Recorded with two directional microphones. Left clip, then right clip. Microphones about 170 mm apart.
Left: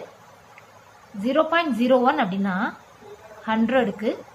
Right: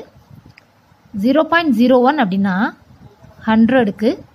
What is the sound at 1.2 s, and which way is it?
A woman's voice, 45° right (ahead or behind).